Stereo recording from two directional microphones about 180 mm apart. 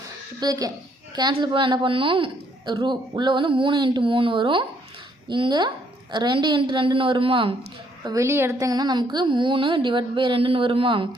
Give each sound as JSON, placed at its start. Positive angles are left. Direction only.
{"t": 0.3, "sound": "a woman's voice", "side_deg": -20}
{"t": 8.0, "sound": "a woman's voice", "side_deg": -15}